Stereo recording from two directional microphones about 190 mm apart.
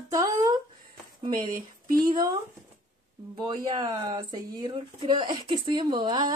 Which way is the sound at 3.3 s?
20° right (ahead or behind).